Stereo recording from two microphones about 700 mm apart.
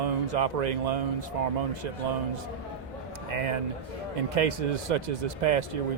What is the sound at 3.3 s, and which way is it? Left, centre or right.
A man's voice, right.